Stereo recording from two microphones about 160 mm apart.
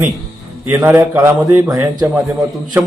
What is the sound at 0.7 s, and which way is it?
A man's voice, 10° right (ahead or behind).